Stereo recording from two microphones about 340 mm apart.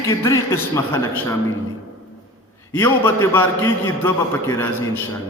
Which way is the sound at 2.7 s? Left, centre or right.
Centre.